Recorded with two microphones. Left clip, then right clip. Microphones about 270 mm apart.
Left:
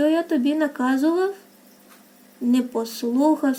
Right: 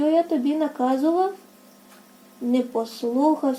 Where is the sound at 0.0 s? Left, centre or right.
Left.